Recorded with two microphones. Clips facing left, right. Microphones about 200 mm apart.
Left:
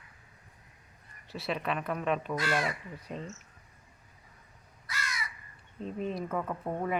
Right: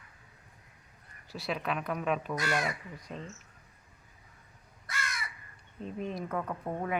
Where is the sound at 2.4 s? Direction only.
15° right (ahead or behind).